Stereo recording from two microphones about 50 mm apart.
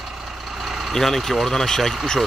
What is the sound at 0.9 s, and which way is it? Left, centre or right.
Speech, centre.